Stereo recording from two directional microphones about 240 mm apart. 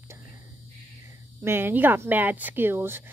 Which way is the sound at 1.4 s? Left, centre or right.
Centre.